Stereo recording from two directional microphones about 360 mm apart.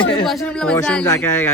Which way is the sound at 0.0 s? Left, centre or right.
Centre.